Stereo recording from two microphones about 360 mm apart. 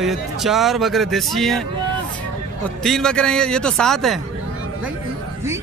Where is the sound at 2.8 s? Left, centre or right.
Centre.